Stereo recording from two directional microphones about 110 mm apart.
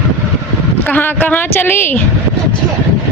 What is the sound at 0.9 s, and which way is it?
A woman's voice, 15° left (ahead or behind).